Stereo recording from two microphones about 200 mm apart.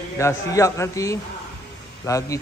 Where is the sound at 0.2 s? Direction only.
15° left (ahead or behind).